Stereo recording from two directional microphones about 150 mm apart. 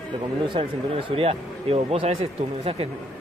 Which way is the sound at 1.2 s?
40° right (ahead or behind).